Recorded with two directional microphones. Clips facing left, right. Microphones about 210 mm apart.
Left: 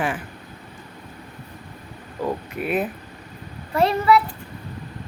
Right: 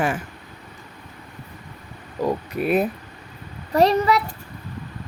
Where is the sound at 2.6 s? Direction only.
40° right (ahead or behind).